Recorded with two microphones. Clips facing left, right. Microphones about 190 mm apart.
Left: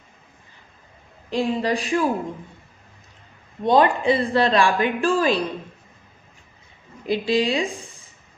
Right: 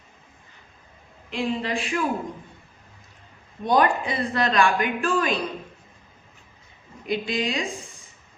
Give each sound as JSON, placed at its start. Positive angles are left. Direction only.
{"t": 1.3, "sound": "speech", "side_deg": 40}
{"t": 3.6, "sound": "speech", "side_deg": 25}
{"t": 7.1, "sound": "speech", "side_deg": 30}